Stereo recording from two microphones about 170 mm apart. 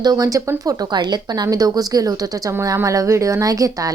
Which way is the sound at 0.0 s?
20° right (ahead or behind).